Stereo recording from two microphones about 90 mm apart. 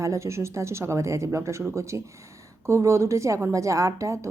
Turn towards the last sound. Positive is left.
turn(degrees=-35)  # may be behind; listen again after turning